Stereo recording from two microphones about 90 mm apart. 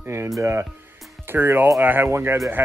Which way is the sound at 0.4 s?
30° right (ahead or behind).